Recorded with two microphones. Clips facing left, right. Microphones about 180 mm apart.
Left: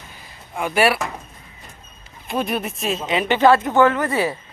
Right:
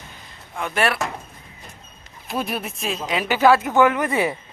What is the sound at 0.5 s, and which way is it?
Speech, 10° left (ahead or behind).